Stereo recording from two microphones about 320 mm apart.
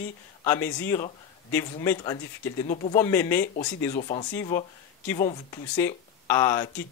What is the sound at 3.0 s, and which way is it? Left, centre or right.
Speech, centre.